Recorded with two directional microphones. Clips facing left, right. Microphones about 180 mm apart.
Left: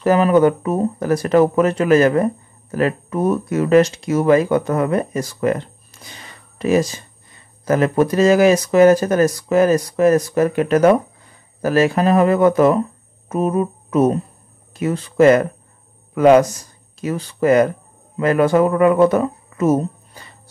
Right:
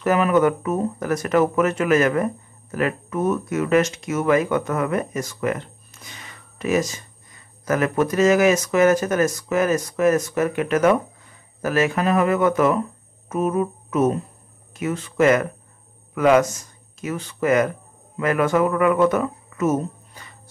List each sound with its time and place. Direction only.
0.0 s speech: 30° left (ahead or behind)